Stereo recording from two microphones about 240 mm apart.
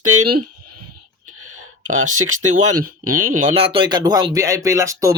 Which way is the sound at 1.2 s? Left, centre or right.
Right.